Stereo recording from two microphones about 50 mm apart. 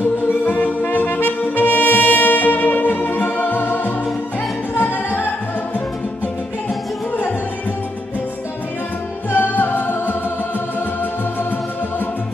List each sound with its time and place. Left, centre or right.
0.5 s brass instrument: left
9.3 s music: left